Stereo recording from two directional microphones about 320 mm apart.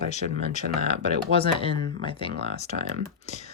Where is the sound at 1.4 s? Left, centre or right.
Centre.